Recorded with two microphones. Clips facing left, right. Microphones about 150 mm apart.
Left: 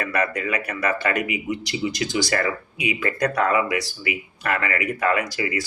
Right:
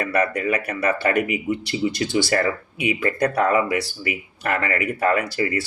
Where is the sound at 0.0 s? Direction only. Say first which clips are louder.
Right 3 dB; 35° right (ahead or behind).